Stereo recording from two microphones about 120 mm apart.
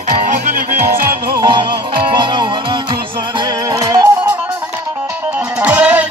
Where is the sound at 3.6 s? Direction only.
30° right (ahead or behind).